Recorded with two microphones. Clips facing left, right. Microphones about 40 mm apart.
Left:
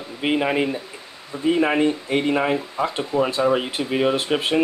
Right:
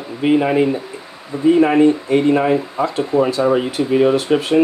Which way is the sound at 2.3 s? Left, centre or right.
Centre.